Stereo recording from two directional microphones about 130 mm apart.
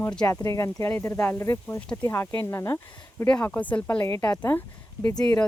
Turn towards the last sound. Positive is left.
turn(degrees=30)  # may be behind; listen again after turning